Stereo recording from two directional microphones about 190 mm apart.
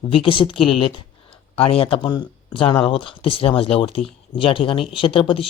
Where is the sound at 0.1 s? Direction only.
25° left (ahead or behind).